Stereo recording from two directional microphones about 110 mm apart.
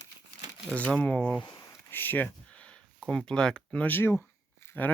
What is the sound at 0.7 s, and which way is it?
Speech, 10° left (ahead or behind).